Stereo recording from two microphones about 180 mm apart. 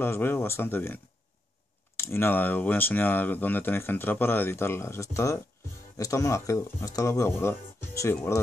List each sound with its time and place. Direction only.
0.0 s speech: 10° left (ahead or behind)
2.0 s speech: 15° left (ahead or behind)